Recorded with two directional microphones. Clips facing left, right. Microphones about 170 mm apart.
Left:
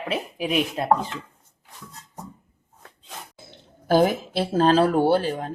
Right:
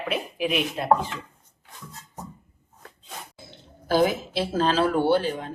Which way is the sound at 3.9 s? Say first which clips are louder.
Left 2 dB; 50° left (ahead or behind).